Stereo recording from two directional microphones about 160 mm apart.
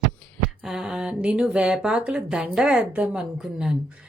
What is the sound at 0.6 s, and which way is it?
Speech, 5° right (ahead or behind).